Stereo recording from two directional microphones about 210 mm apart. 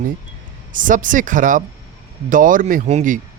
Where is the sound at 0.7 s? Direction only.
40° right (ahead or behind).